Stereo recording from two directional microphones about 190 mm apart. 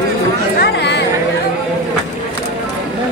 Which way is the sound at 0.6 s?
60° left (ahead or behind).